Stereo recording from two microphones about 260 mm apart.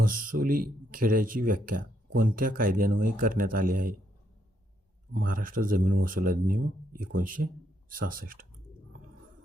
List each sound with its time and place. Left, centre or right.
0.0 s speech: right
5.1 s speech: right